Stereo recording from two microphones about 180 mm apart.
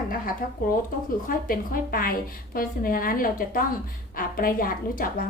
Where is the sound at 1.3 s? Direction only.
50° left (ahead or behind).